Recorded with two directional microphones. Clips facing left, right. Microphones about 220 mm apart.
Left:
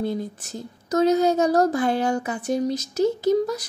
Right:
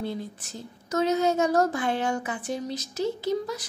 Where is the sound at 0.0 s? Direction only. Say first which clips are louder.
Left 6 dB; 45° left (ahead or behind).